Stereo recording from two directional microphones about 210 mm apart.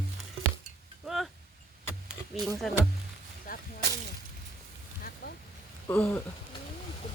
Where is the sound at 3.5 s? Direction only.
45° left (ahead or behind).